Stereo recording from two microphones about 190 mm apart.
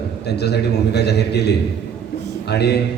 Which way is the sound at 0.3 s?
60° left (ahead or behind).